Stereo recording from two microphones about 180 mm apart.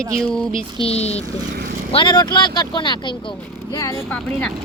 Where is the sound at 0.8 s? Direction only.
35° left (ahead or behind).